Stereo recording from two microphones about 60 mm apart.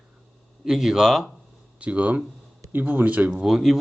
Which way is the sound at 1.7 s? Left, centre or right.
Right.